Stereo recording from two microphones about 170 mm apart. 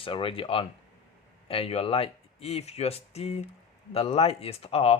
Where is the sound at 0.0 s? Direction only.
30° left (ahead or behind).